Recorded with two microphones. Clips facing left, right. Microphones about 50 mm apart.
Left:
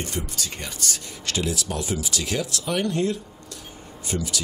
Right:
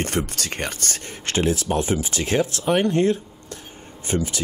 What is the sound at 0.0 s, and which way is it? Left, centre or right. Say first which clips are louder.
Speech: right 5 dB; right.